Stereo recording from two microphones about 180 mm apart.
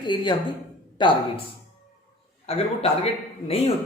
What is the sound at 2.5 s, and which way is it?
Speech, 35° left (ahead or behind).